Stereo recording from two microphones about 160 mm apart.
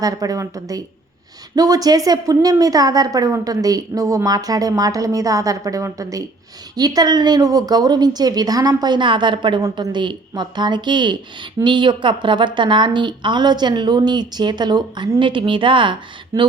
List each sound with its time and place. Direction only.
0.0 s a woman's voice: 20° right (ahead or behind)